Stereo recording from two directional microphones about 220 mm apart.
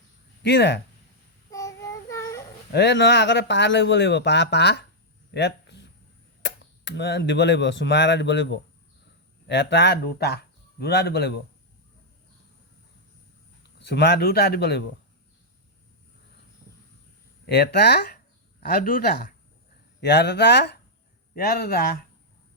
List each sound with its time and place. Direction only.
0.4 s speech: 50° left (ahead or behind)
1.5 s child singing: 15° left (ahead or behind)
2.7 s speech: 50° left (ahead or behind)
5.3 s a sound: 50° left (ahead or behind)
6.4 s speech: 55° left (ahead or behind)
13.6 s speech: 50° left (ahead or behind)
17.4 s speech: 50° left (ahead or behind)
20.0 s speech: 50° left (ahead or behind)